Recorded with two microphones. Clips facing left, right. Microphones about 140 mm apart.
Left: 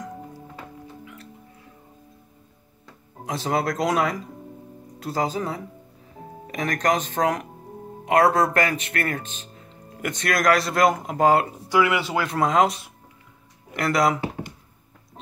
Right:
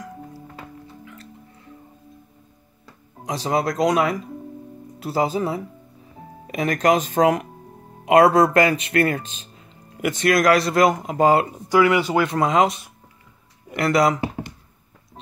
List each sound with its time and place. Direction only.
3.3 s speech: centre (ahead or behind); by 9.2 s 15° right (ahead or behind)
10.0 s speech: centre (ahead or behind)